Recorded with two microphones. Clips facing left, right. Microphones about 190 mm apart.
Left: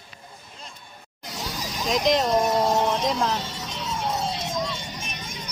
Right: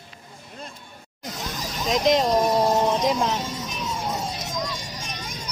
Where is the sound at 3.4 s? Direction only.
30° left (ahead or behind).